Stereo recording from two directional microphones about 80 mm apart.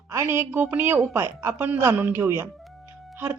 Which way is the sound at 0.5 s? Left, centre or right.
Right.